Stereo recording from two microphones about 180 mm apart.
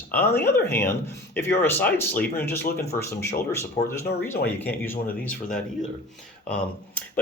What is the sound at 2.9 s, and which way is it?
Speech, 45° left (ahead or behind).